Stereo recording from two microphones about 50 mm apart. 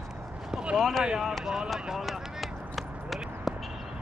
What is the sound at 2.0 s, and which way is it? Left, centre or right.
Run, centre.